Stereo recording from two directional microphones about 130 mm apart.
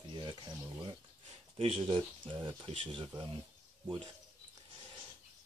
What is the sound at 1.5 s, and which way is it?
Speech, 45° right (ahead or behind).